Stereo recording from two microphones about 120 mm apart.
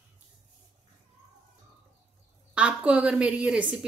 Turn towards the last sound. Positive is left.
turn(degrees=-10)  # may be behind; listen again after turning